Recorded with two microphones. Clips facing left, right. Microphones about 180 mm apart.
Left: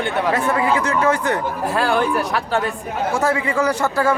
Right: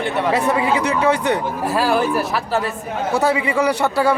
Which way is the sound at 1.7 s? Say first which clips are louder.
Right 1 dB; 5° right (ahead or behind).